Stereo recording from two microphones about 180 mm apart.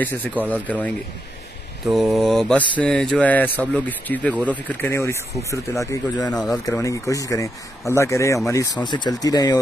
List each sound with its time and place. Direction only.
0.0 s speech: 10° left (ahead or behind)
1.9 s mantra: centre (ahead or behind)
2.8 s speech: 5° left (ahead or behind); by 9.6 s 20° left (ahead or behind)